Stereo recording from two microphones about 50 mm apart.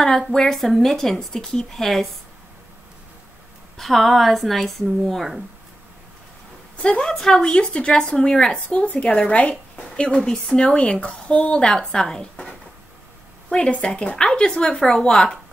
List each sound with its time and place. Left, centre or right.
0.3 s speech: centre
3.7 s speech: centre
6.8 s a woman's voice: centre
10.8 s a woman's voice: left